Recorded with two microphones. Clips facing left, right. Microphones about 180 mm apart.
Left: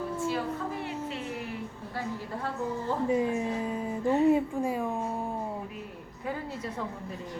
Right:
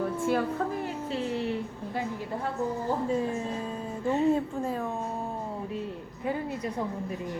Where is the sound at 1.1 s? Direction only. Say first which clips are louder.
Right 6 dB; 30° right (ahead or behind).